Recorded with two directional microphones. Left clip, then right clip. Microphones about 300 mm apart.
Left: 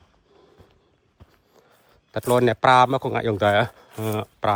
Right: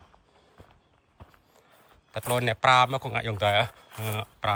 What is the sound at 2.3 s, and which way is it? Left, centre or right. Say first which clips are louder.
Speech: left 5 dB; centre.